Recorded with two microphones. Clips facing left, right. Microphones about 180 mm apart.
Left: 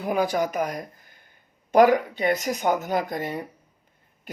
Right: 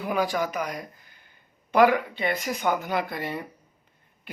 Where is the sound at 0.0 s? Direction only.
45° left (ahead or behind).